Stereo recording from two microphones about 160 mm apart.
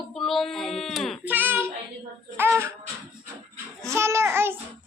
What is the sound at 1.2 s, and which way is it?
Child singing, 10° right (ahead or behind).